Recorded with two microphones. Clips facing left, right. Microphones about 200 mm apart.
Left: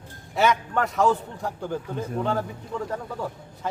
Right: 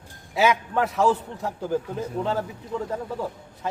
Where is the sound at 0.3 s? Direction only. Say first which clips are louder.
Right 1 dB; centre (ahead or behind).